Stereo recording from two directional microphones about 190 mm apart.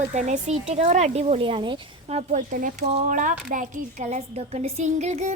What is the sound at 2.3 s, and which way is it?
Speech, 45° right (ahead or behind).